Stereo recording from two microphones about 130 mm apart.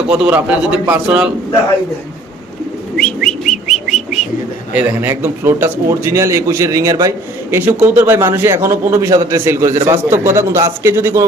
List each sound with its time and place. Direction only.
0.1 s a man's voice: 15° right (ahead or behind)
3.2 s bird: centre (ahead or behind)
4.7 s a man's voice: 15° right (ahead or behind)